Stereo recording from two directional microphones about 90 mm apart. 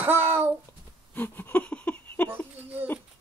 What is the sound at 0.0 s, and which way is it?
Babbling, 25° right (ahead or behind).